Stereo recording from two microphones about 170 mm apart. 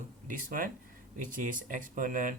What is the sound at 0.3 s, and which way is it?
Speech, 55° right (ahead or behind).